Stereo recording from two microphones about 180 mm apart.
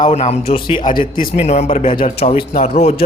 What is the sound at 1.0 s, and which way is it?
Speech, 50° left (ahead or behind).